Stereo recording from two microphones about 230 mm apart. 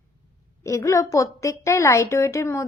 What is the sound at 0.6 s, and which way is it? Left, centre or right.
A woman's voice, centre.